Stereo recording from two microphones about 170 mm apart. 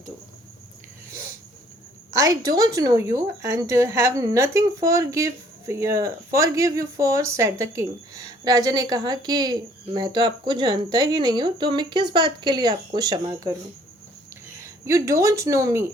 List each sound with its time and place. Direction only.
2.1 s speech: 20° right (ahead or behind)
14.6 s speech: 20° right (ahead or behind)